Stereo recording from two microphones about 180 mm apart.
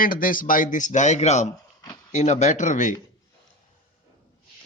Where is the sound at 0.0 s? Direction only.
50° left (ahead or behind).